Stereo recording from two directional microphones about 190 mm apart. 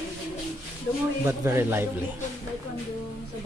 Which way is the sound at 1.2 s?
15° right (ahead or behind).